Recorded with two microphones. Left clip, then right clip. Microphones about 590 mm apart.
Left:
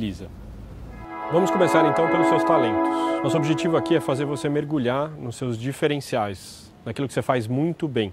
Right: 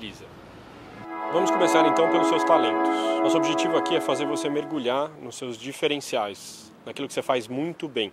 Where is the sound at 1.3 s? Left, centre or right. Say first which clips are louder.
Left 2 dB; left.